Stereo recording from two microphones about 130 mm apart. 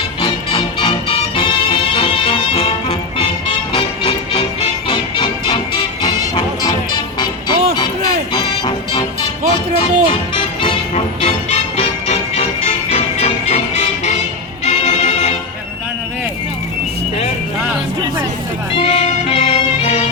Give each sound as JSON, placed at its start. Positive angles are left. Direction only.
{"t": 0.2, "sound": "music", "side_deg": 40}
{"t": 10.9, "sound": "music", "side_deg": 55}
{"t": 18.8, "sound": "music", "side_deg": 55}